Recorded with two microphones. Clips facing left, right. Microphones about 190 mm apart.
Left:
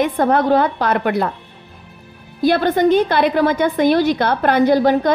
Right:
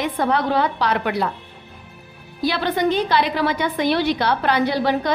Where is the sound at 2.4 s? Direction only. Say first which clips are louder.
Left 6 dB; 50° left (ahead or behind).